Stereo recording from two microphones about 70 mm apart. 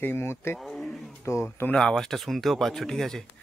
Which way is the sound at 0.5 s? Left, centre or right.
Centre.